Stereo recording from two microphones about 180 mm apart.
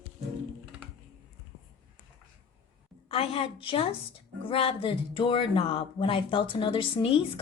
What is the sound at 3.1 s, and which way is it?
A woman's voice, 30° left (ahead or behind).